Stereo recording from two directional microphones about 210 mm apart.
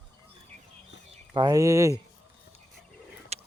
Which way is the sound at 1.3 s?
20° right (ahead or behind).